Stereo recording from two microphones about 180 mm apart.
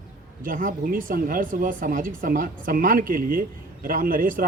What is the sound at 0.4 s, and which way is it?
Speech, 50° right (ahead or behind).